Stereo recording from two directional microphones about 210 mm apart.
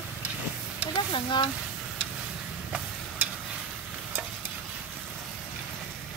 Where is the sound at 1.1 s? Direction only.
20° left (ahead or behind).